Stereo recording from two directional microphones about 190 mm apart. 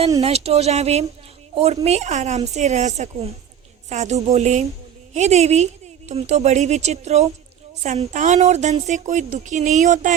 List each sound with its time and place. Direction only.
0.2 s speech: 35° right (ahead or behind)